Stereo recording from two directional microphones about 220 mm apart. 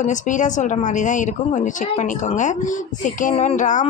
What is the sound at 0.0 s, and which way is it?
A woman's voice, 35° left (ahead or behind).